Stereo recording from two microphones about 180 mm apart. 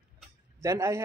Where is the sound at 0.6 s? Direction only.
15° right (ahead or behind).